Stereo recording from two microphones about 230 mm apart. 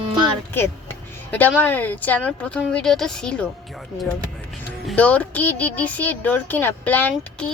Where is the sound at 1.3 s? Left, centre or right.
Centre.